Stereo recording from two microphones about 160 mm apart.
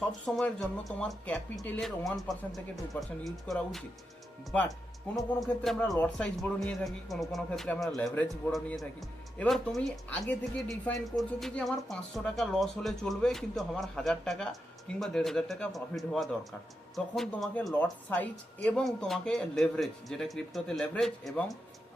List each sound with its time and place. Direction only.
0.3 s a woman's voice: centre (ahead or behind)
5.4 s a woman's voice: centre (ahead or behind)